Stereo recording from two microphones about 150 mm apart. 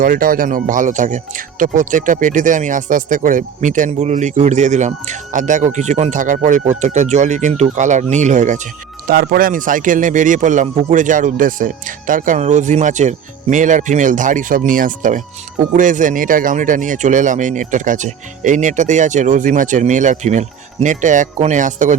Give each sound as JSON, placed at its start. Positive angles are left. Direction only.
{"t": 0.0, "sound": "speech", "side_deg": -70}
{"t": 9.0, "sound": "speech", "side_deg": -85}